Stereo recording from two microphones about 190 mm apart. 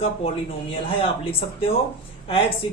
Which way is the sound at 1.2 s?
30° left (ahead or behind).